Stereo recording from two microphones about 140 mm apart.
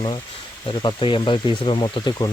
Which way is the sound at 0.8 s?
35° left (ahead or behind).